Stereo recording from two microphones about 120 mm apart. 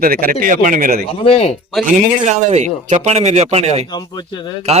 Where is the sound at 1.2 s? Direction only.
55° left (ahead or behind).